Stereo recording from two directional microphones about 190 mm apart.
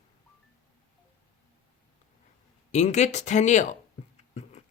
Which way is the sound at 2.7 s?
35° left (ahead or behind).